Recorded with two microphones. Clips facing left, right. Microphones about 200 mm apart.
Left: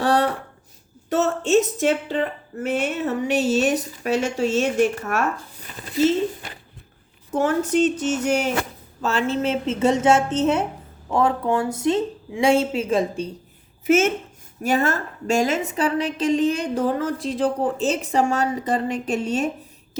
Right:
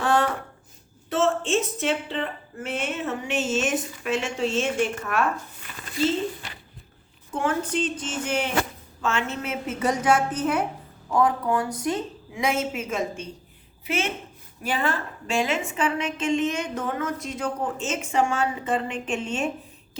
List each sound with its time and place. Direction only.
0.0 s a sound: 35° left (ahead or behind)
1.1 s a woman's voice: 40° left (ahead or behind)
7.3 s a woman's voice: 40° left (ahead or behind)
13.8 s a woman's voice: 45° left (ahead or behind)